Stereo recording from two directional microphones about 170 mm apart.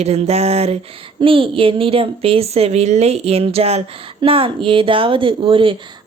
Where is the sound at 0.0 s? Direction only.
40° right (ahead or behind).